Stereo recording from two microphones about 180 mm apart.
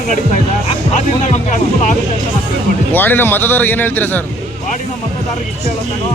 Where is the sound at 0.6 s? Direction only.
40° left (ahead or behind).